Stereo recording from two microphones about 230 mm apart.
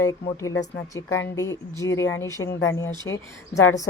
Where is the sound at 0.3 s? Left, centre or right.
Centre.